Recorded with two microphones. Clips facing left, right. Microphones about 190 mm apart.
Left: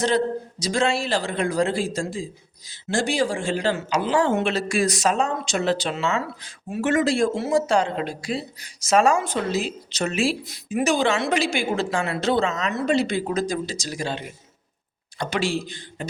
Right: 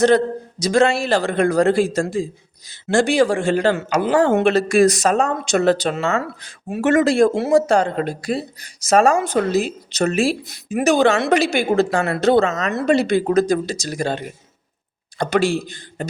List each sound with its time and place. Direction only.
0.6 s a woman's voice: 65° right (ahead or behind); by 9.1 s 45° right (ahead or behind)
9.1 s a woman's voice: 60° right (ahead or behind)
9.5 s speech: 50° right (ahead or behind)
10.5 s a woman's voice: 60° right (ahead or behind)
12.7 s a woman's voice: 65° right (ahead or behind); by 16.0 s 50° right (ahead or behind)